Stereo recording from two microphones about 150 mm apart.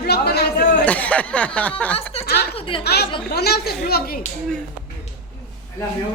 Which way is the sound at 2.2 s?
90° left.